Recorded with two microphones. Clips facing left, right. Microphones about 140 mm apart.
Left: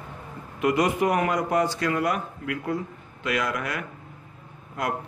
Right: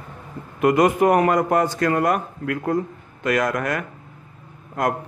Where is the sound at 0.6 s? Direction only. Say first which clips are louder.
Right 6 dB; 50° right (ahead or behind).